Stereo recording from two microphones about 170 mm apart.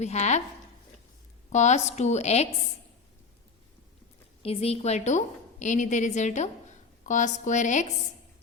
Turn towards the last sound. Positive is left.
turn(degrees=45)  # may be behind; listen again after turning